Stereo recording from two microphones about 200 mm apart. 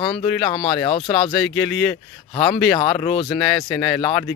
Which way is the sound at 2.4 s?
25° left (ahead or behind).